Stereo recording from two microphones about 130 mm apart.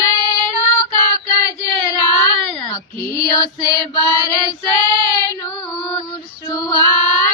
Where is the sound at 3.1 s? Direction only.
25° left (ahead or behind).